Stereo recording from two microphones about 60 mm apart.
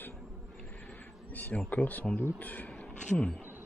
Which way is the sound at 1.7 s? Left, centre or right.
Left.